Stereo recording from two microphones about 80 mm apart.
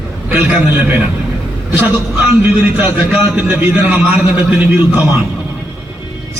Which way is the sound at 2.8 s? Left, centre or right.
Right.